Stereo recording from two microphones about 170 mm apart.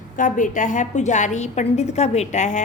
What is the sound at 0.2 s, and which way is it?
A woman's voice, 50° left (ahead or behind).